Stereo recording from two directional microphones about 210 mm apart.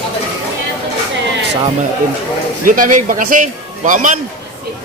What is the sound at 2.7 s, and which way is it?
A man's voice, 40° right (ahead or behind).